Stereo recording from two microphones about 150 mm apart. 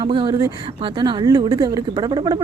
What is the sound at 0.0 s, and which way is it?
A woman's voice, 35° right (ahead or behind).